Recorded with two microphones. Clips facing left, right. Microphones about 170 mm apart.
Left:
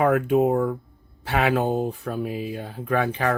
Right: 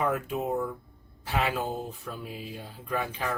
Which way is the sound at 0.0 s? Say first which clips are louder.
Left 10 dB; 65° left (ahead or behind).